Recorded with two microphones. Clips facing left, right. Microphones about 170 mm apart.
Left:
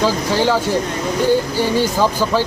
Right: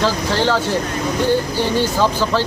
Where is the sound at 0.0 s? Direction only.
10° left (ahead or behind).